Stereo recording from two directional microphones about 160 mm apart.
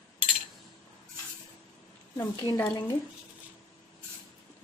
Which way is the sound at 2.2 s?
15° left (ahead or behind).